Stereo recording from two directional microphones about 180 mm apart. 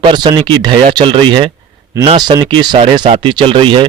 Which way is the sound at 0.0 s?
25° right (ahead or behind).